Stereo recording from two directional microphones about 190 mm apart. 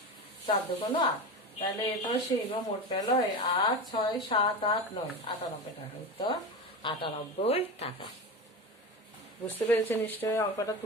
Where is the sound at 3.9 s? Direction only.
25° left (ahead or behind).